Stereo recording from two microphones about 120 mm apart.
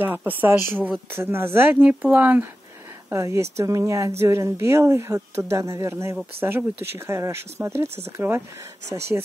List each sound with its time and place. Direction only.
0.0 s speech: 15° right (ahead or behind)
9.1 s speech: 15° right (ahead or behind)